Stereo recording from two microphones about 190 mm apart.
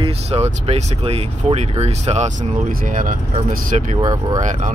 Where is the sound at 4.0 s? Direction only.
20° right (ahead or behind).